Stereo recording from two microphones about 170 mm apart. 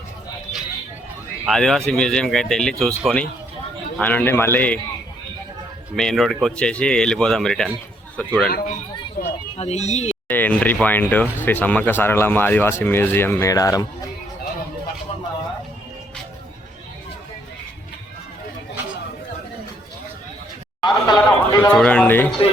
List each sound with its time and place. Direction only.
1.5 s speech: centre (ahead or behind)
6.0 s speech: centre (ahead or behind)
8.4 s speech: 60° left (ahead or behind)
9.6 s speech: 40° left (ahead or behind)
10.2 s speech: 10° left (ahead or behind)
20.8 s a sound: 25° left (ahead or behind)
21.6 s speech: 5° left (ahead or behind)